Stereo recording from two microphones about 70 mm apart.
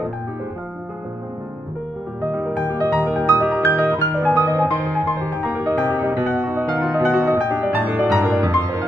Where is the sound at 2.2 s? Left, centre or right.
Right.